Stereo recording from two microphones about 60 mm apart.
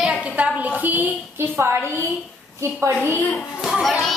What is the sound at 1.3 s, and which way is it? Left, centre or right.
A woman's voice, right.